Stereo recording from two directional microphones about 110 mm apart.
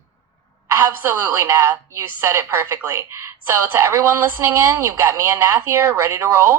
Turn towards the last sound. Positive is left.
turn(degrees=-25)  # may be behind; listen again after turning